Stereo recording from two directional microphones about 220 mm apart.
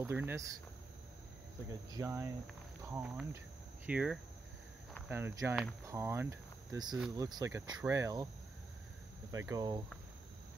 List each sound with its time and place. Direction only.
0.0 s speech: 10° right (ahead or behind)
1.7 s speech: 15° right (ahead or behind)
9.5 s speech: 15° right (ahead or behind)